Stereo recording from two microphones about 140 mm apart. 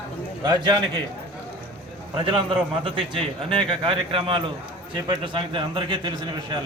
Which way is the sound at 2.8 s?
35° right (ahead or behind).